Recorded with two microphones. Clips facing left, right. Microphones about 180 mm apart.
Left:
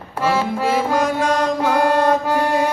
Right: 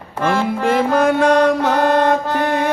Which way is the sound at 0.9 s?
60° right (ahead or behind).